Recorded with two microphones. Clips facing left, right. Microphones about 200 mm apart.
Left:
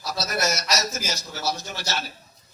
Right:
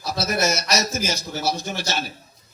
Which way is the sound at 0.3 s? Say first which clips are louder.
Right 3 dB; 25° right (ahead or behind).